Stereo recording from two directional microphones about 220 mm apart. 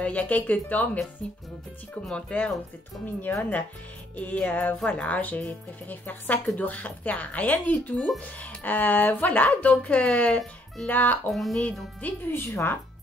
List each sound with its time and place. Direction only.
0.0 s speech: 5° left (ahead or behind)
2.0 s speech: 5° left (ahead or behind)